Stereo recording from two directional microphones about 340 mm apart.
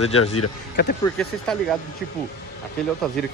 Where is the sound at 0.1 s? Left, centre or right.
Left.